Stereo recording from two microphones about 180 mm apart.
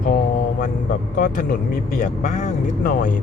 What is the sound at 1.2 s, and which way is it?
Speech, 50° left (ahead or behind).